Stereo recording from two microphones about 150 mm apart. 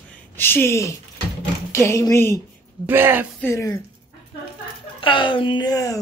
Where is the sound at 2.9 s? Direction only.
15° right (ahead or behind).